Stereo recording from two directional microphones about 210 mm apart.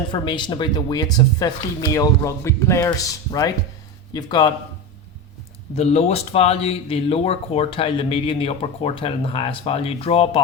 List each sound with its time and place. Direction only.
0.1 s speech: 20° left (ahead or behind)
5.7 s speech: 30° left (ahead or behind)